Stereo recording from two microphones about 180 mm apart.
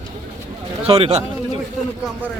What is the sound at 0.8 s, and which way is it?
Speech, 35° right (ahead or behind).